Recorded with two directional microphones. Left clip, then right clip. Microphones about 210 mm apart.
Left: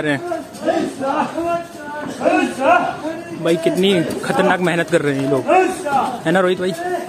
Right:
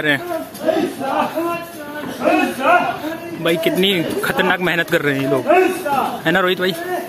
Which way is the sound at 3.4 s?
10° left (ahead or behind).